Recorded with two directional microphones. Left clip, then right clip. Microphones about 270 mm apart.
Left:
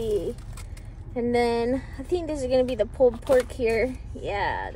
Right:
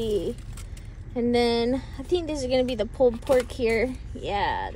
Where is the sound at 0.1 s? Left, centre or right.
Centre.